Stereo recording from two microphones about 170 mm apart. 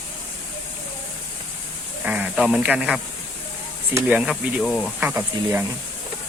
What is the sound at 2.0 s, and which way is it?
Speech, 5° right (ahead or behind).